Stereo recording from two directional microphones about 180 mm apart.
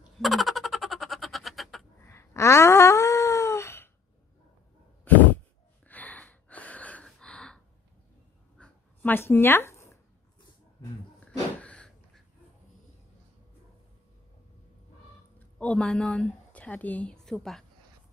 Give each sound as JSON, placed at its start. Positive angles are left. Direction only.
{"t": 0.2, "sound": "a sound", "side_deg": 0}
{"t": 2.0, "sound": "wail", "side_deg": 15}
{"t": 5.9, "sound": "gasp", "side_deg": 10}
{"t": 8.5, "sound": "dog", "side_deg": 10}
{"t": 11.1, "sound": "a sound", "side_deg": 5}
{"t": 15.3, "sound": "speech", "side_deg": 5}